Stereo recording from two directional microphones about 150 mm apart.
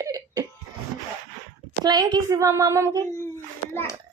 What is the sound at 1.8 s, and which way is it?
A child's voice, 25° right (ahead or behind).